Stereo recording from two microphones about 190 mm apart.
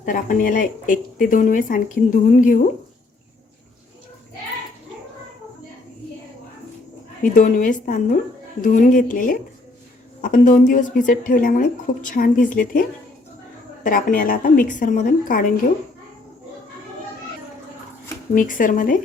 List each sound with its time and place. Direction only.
0.0 s speech: 45° left (ahead or behind)
7.2 s speech: 40° left (ahead or behind)
13.8 s speech: 45° left (ahead or behind)
18.3 s speech: 45° left (ahead or behind)